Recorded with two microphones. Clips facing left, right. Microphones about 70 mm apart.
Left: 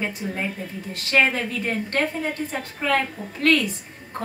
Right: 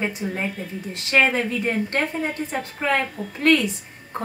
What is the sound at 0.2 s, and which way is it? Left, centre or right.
A woman's voice, right.